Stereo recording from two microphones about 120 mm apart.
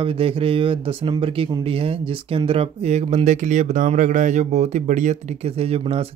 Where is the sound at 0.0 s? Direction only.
50° right (ahead or behind); by 3.2 s 70° right (ahead or behind).